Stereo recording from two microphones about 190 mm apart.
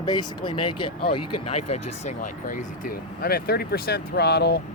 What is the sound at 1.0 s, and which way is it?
Speech, 35° left (ahead or behind).